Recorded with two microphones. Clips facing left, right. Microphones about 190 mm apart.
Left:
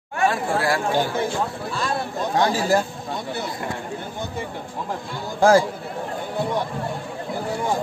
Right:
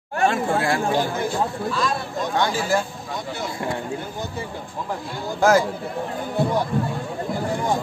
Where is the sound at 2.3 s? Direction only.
35° left (ahead or behind).